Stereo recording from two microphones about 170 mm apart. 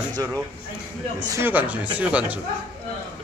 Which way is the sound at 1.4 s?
10° right (ahead or behind).